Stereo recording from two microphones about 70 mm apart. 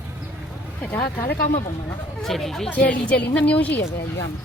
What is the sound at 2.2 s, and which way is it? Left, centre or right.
Speech, centre.